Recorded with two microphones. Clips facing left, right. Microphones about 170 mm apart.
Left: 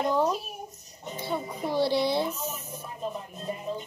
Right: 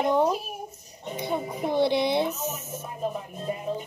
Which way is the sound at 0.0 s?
10° right (ahead or behind).